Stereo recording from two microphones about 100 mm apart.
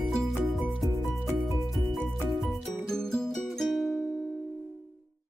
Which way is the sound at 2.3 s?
5° left (ahead or behind).